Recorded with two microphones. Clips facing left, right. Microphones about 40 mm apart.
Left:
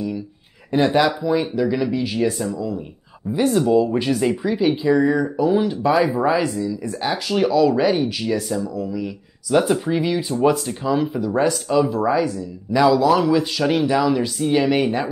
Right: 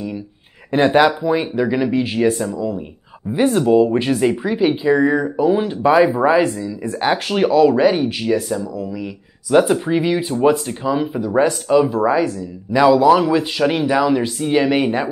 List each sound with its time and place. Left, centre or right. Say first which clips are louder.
0.7 s speech: right 4 dB; right
7.0 s speech: right 4 dB; right
8.5 s speech: right 1 dB; centre
11.1 s speech: right 3 dB; right